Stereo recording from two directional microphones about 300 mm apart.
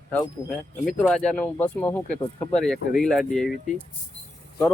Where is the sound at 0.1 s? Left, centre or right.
Centre.